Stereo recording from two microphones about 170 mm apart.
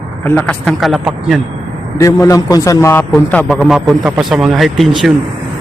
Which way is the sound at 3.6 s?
5° right (ahead or behind).